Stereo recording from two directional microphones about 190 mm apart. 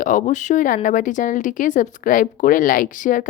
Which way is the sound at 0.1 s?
40° left (ahead or behind).